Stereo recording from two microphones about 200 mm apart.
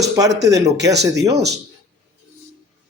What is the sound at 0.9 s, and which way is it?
Speech, 55° right (ahead or behind).